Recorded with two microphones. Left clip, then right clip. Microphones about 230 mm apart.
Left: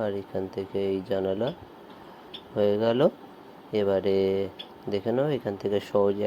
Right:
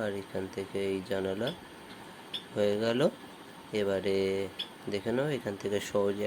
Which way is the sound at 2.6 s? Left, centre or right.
Centre.